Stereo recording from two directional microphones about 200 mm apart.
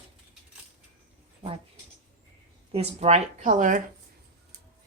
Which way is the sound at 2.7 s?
30° right (ahead or behind).